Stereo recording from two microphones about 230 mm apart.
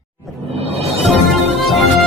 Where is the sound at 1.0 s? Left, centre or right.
Centre.